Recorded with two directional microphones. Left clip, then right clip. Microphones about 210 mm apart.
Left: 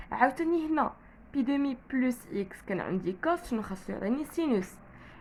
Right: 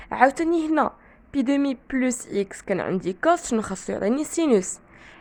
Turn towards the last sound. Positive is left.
turn(degrees=-45)  # may be behind; listen again after turning